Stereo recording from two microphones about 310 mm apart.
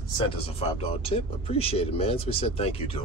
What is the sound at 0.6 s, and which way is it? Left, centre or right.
Speech, centre.